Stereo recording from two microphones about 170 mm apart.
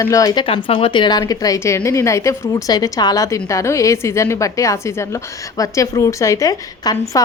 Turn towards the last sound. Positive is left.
turn(degrees=20)  # may be behind; listen again after turning